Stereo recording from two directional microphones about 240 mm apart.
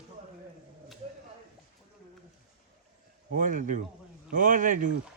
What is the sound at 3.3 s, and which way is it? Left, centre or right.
Speech, right.